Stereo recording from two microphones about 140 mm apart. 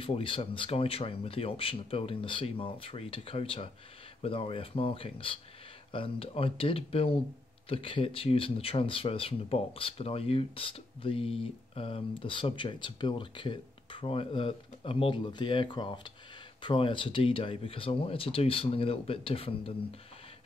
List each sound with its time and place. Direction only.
0.0 s speech: 40° left (ahead or behind)